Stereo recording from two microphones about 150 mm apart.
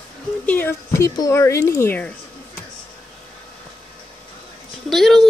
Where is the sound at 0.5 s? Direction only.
15° left (ahead or behind).